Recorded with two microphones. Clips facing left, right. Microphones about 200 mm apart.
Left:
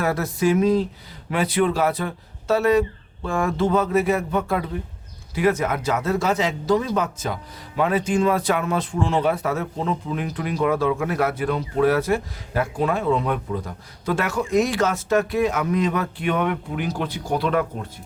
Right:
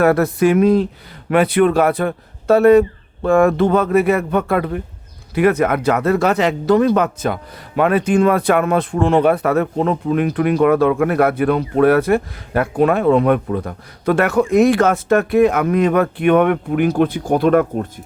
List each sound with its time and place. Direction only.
0.0 s speech: 60° right (ahead or behind)